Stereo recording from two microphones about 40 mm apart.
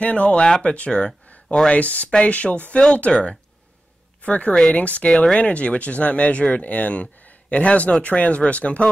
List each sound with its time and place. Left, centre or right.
0.0 s speech: left
1.7 s speech: left
5.1 s speech: left
5.4 s speech: left
7.2 s a sound: left
8.0 s speech: left